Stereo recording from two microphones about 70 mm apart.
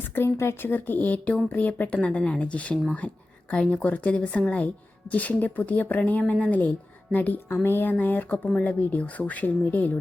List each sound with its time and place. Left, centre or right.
0.2 s speech: left
0.6 s a woman's voice: left